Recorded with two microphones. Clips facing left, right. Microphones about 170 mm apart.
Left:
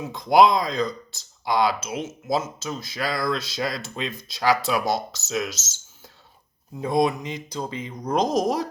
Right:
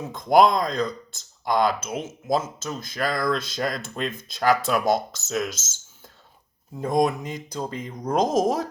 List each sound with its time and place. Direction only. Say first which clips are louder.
0.1 s speech: left 1 dB; 50° right (ahead or behind)